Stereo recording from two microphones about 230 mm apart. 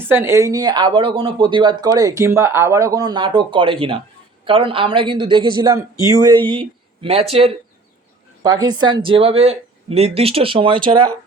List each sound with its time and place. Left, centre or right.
0.0 s speech: centre